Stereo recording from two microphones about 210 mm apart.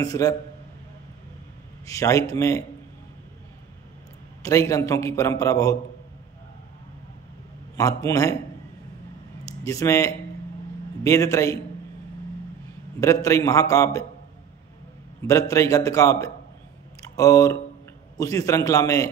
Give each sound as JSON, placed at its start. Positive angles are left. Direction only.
{"t": 0.0, "sound": "a man's voice", "side_deg": 15}
{"t": 1.9, "sound": "a man's voice", "side_deg": 15}
{"t": 4.4, "sound": "a man's voice", "side_deg": 15}
{"t": 7.7, "sound": "a man's voice", "side_deg": 15}
{"t": 9.4, "sound": "a man's voice", "side_deg": 15}
{"t": 13.0, "sound": "a man's voice", "side_deg": 15}
{"t": 15.2, "sound": "a man's voice", "side_deg": 15}